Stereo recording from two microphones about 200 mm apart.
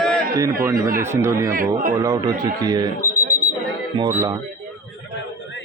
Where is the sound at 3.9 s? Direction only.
15° right (ahead or behind).